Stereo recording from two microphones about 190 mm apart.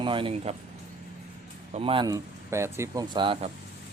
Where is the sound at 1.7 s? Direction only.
30° right (ahead or behind).